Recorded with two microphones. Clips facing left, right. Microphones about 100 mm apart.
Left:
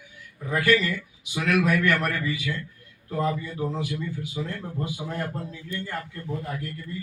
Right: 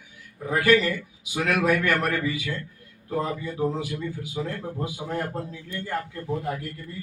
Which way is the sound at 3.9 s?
45° right (ahead or behind).